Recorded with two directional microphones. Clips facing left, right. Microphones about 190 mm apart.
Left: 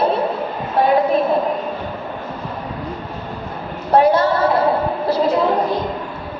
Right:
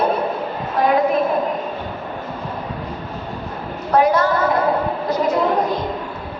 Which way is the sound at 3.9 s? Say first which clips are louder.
Left 2 dB; 30° left (ahead or behind).